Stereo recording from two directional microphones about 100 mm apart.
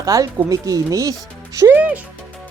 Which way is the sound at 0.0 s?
35° right (ahead or behind).